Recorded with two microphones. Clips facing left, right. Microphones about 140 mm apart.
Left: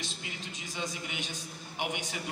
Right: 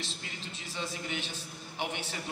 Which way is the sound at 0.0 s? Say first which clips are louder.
Left 1 dB; 15° left (ahead or behind).